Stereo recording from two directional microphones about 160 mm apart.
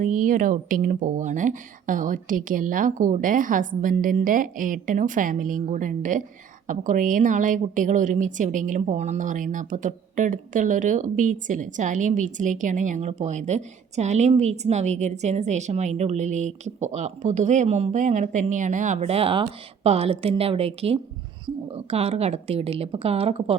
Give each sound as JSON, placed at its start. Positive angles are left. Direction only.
{"t": 0.0, "sound": "a woman's voice", "side_deg": -55}